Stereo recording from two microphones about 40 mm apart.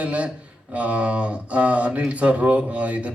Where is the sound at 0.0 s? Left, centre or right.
Right.